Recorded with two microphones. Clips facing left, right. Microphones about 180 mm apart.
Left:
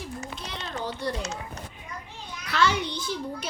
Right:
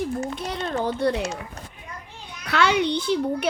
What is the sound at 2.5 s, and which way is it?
A child's voice, 65° right (ahead or behind).